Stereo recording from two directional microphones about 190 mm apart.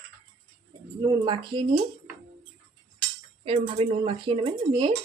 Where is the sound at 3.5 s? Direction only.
30° right (ahead or behind).